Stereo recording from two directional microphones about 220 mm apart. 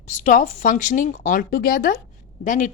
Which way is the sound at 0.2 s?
35° left (ahead or behind).